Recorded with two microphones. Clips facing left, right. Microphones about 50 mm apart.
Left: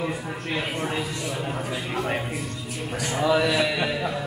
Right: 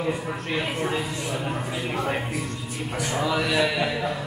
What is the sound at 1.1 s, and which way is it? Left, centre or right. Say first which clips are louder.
Speech: right 1 dB; centre.